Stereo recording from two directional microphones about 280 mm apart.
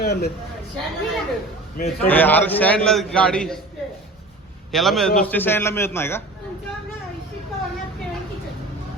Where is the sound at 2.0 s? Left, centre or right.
Centre.